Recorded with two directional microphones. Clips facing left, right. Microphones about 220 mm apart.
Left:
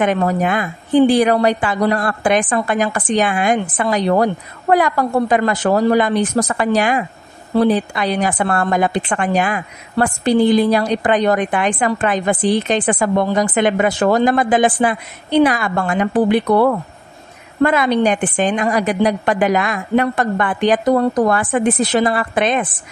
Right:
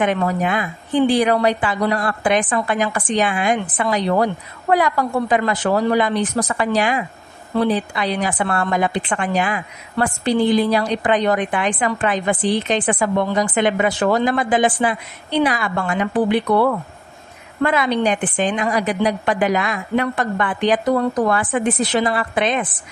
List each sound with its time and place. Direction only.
0.0 s a woman's voice: 45° left (ahead or behind)